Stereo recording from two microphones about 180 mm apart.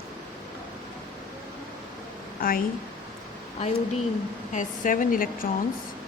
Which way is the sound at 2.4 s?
55° left (ahead or behind).